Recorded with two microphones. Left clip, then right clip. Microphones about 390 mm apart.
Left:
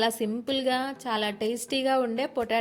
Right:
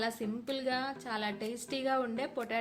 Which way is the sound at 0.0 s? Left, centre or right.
Centre.